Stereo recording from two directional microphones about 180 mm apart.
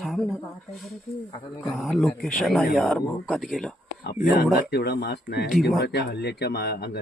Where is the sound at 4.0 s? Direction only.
60° left (ahead or behind).